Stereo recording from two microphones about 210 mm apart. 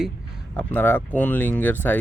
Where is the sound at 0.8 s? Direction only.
10° left (ahead or behind).